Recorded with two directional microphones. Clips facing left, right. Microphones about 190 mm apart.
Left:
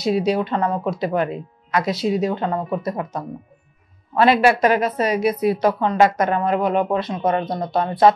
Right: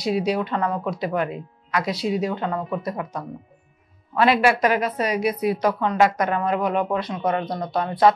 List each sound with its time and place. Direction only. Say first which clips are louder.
0.0 s a woman's voice: left 3 dB; 25° left (ahead or behind)